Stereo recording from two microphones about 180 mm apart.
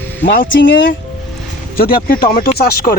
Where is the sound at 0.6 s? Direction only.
90° left.